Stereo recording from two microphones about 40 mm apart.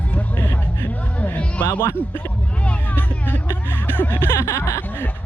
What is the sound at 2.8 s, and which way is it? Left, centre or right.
Music, left.